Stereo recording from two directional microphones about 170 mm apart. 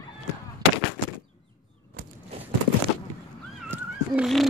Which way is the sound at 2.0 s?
55° right (ahead or behind).